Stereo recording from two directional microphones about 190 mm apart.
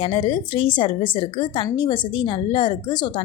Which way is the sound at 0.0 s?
25° left (ahead or behind).